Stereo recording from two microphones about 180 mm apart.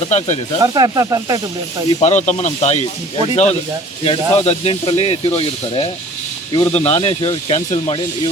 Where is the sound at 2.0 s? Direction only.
40° left (ahead or behind).